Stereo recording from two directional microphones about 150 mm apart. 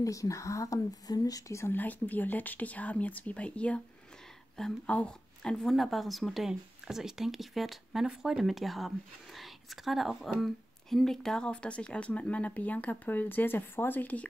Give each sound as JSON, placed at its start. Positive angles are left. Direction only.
{"t": 0.0, "sound": "speech", "side_deg": 20}